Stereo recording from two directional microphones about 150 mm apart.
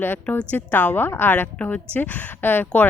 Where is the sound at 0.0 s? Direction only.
10° left (ahead or behind).